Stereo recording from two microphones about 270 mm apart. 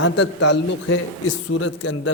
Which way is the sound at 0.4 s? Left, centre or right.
Left.